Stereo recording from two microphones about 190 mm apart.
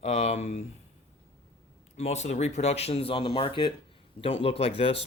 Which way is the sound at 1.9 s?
35° left (ahead or behind).